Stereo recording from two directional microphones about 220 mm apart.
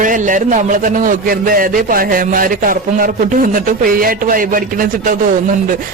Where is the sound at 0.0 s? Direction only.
35° right (ahead or behind).